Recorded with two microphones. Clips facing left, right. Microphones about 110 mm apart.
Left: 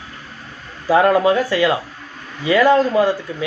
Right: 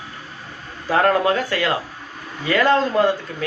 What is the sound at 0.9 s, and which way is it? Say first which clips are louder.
A man's voice: left 4 dB; 10° left (ahead or behind).